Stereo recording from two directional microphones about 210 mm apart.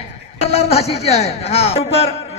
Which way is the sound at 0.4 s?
30° left (ahead or behind).